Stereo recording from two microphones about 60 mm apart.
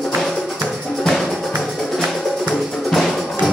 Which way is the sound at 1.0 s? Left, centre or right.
Centre.